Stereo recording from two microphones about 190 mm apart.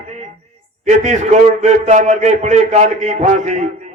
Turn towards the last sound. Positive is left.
turn(degrees=-35)  # may be behind; listen again after turning